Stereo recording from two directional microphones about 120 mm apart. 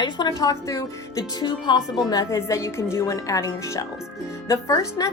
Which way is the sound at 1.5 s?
35° left (ahead or behind).